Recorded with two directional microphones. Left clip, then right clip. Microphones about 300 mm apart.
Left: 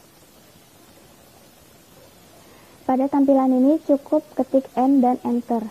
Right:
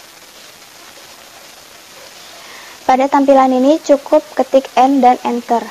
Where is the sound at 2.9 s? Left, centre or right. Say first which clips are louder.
Right 9 dB; centre.